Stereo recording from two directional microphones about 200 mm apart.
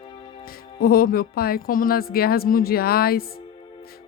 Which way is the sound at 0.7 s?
50° left (ahead or behind).